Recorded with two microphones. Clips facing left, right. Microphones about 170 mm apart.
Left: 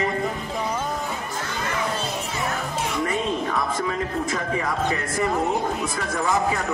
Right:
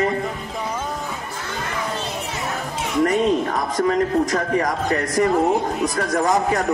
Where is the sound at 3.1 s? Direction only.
40° right (ahead or behind).